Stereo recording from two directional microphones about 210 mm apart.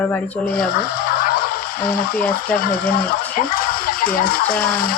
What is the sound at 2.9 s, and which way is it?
Speech, 45° left (ahead or behind).